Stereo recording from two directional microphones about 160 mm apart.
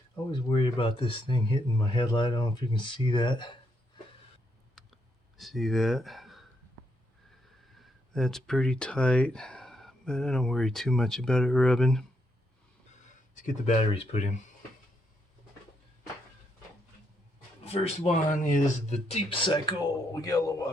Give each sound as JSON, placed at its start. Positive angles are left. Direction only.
{"t": 0.3, "sound": "speech", "side_deg": 30}
{"t": 5.4, "sound": "speech", "side_deg": 0}
{"t": 8.1, "sound": "speech", "side_deg": 5}
{"t": 13.3, "sound": "speech", "side_deg": 50}
{"t": 17.6, "sound": "speech", "side_deg": 40}
{"t": 18.3, "sound": "a man's voice", "side_deg": 55}